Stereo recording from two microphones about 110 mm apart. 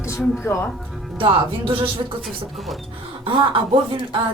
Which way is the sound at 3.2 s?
50° right (ahead or behind).